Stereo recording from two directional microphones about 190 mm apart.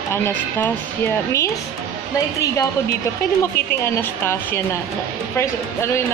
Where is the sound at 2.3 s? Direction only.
15° left (ahead or behind).